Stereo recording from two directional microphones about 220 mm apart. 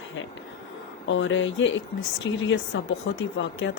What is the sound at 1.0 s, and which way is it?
Speech, 55° left (ahead or behind).